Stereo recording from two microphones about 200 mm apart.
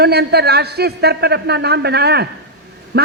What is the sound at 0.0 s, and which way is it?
A man's voice, 55° right (ahead or behind).